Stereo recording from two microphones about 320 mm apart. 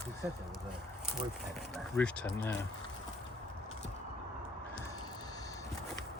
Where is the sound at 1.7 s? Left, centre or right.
Centre.